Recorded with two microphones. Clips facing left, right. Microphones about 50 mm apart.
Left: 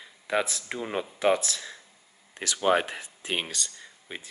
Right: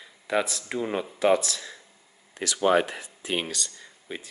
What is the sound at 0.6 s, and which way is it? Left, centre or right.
Speech, centre.